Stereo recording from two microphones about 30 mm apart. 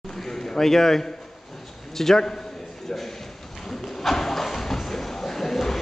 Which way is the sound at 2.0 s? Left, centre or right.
Centre.